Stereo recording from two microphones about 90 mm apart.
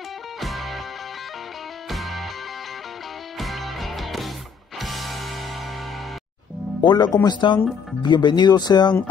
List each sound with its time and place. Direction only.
0.4 s music: centre (ahead or behind)
1.9 s music: centre (ahead or behind)
3.3 s music: centre (ahead or behind)
6.8 s speech: 55° left (ahead or behind)